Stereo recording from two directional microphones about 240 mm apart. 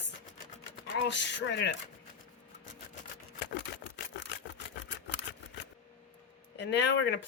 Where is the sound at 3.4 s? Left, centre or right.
Left.